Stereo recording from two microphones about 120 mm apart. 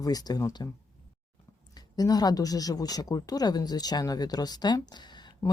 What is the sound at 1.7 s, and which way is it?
Speech, 35° left (ahead or behind).